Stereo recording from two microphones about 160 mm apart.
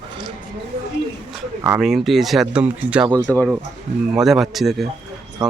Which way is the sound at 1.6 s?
5° right (ahead or behind).